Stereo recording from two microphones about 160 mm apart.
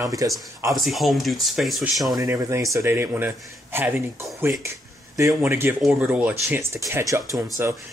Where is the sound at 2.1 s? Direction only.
20° right (ahead or behind).